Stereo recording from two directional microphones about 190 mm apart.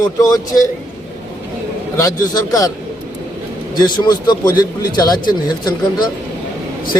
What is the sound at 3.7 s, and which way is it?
A man's voice, 20° left (ahead or behind).